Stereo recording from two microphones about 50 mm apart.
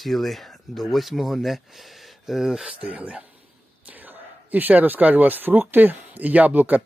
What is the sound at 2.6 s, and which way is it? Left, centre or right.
Speech, right.